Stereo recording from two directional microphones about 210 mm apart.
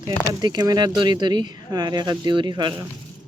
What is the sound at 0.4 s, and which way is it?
Speech, 20° right (ahead or behind).